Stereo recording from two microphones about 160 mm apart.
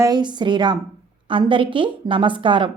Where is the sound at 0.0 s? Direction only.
25° right (ahead or behind).